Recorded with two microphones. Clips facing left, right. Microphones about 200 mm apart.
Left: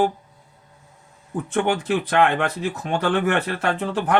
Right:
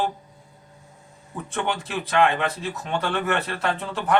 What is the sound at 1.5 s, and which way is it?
Speech, 50° left (ahead or behind).